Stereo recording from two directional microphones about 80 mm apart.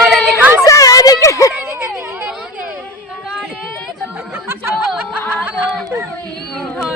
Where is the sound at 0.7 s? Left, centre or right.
Left.